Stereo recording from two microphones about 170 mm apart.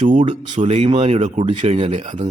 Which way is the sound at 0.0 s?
45° right (ahead or behind).